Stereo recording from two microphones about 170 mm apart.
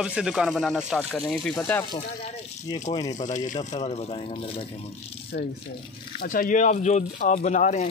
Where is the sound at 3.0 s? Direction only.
45° left (ahead or behind).